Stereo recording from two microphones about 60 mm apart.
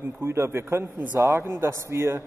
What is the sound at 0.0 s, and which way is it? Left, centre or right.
Speech, right.